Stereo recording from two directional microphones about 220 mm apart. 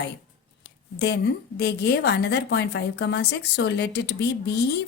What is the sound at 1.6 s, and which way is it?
A woman's voice, 50° left (ahead or behind).